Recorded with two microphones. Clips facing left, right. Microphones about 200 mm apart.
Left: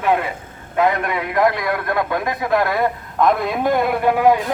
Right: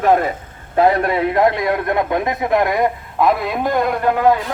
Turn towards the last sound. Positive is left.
turn(degrees=10)  # may be behind; listen again after turning